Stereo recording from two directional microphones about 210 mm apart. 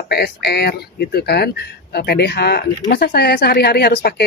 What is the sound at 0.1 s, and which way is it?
Speech, 50° left (ahead or behind).